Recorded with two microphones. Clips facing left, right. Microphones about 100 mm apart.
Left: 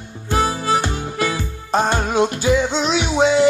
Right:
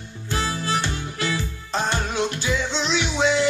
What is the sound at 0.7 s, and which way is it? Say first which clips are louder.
Music: left 6 dB; 45° left (ahead or behind).